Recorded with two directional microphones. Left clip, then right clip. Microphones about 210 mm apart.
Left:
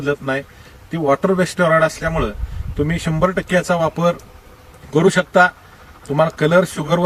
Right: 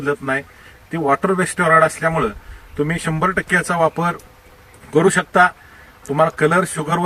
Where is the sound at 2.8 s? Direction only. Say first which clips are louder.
Left 1 dB; 15° left (ahead or behind).